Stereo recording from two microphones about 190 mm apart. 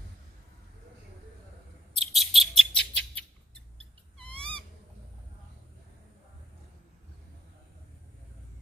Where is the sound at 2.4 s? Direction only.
Centre (ahead or behind).